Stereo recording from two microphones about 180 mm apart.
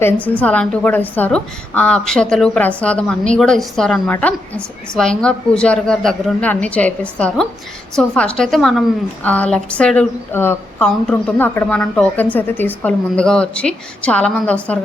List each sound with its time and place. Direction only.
0.0 s a woman's voice: 10° left (ahead or behind)